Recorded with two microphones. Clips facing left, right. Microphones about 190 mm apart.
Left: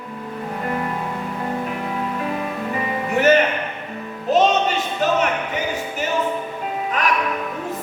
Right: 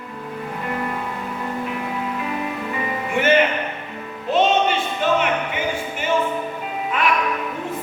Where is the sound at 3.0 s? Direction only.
40° left (ahead or behind).